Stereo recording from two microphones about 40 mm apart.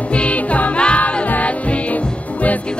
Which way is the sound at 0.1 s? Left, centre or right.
Left.